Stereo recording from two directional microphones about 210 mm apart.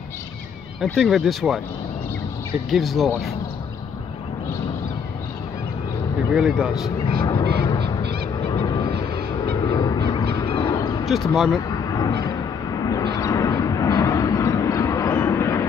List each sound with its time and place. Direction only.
0.8 s speech: centre (ahead or behind)
2.7 s speech: centre (ahead or behind)
6.3 s speech: centre (ahead or behind)
7.2 s goose: 20° left (ahead or behind)
8.0 s owl: 50° right (ahead or behind)
8.5 s music: 15° left (ahead or behind)
9.7 s a sound: 20° left (ahead or behind)
11.3 s speech: centre (ahead or behind)
11.7 s a sound: 15° left (ahead or behind)
12.8 s vehicle: 15° left (ahead or behind)